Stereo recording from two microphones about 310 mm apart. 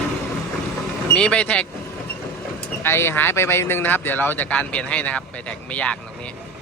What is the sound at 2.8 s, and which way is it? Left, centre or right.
Speech, centre.